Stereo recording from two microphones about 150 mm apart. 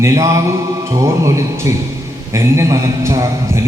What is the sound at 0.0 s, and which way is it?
A man's voice, 20° right (ahead or behind).